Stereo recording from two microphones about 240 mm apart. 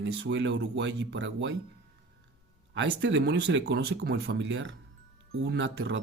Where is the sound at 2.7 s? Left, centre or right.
Right.